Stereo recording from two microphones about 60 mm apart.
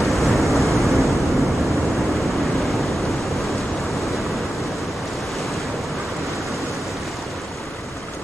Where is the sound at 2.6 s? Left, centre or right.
Centre.